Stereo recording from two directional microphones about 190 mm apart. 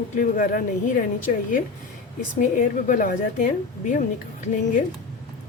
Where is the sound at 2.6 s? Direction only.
45° left (ahead or behind).